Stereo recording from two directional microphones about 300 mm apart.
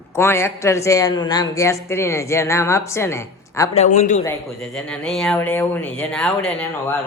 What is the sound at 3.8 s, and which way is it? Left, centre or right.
Speech, left.